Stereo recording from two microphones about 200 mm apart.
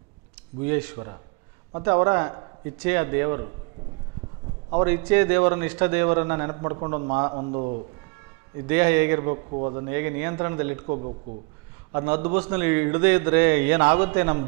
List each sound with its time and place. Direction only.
0.6 s a man's voice: 10° right (ahead or behind)
4.7 s a man's voice: 15° right (ahead or behind); by 7.8 s 30° right (ahead or behind)
8.5 s a man's voice: 15° right (ahead or behind)
9.5 s a man's voice: 30° right (ahead or behind)
9.8 s a man's voice: 15° right (ahead or behind)
10.9 s a man's voice: 35° right (ahead or behind)
11.9 s a man's voice: 15° right (ahead or behind)